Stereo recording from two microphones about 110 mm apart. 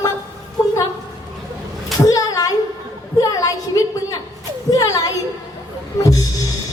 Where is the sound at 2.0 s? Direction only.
30° left (ahead or behind).